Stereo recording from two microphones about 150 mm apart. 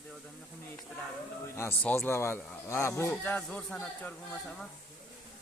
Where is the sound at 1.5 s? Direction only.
15° left (ahead or behind).